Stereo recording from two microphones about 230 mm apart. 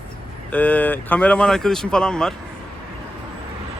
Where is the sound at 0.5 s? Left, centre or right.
Centre.